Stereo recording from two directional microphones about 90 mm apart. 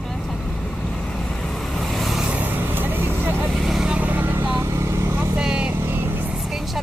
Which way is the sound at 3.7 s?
10° right (ahead or behind).